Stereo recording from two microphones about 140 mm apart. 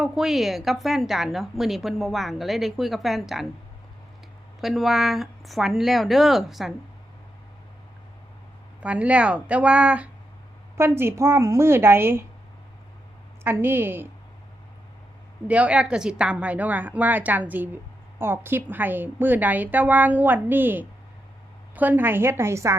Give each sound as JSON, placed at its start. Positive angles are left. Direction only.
{"t": 0.0, "sound": "a woman's voice", "side_deg": -5}
{"t": 4.6, "sound": "a woman's voice", "side_deg": 0}
{"t": 8.8, "sound": "a woman's voice", "side_deg": -10}
{"t": 13.4, "sound": "a woman's voice", "side_deg": -15}
{"t": 15.4, "sound": "a woman's voice", "side_deg": -10}